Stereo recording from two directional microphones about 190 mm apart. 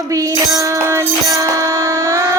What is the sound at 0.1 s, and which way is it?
Music, 15° right (ahead or behind).